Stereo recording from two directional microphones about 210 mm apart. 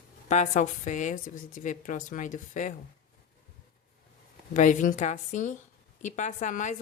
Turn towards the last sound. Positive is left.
turn(degrees=35)  # may be behind; listen again after turning